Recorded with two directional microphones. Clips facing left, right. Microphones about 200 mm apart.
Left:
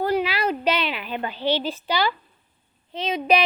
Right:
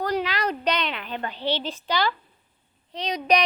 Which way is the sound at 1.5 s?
10° left (ahead or behind).